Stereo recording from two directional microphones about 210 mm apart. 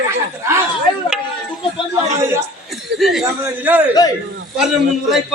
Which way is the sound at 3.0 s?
Centre (ahead or behind).